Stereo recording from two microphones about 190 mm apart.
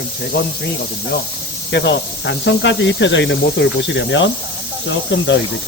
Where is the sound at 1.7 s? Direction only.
65° left (ahead or behind).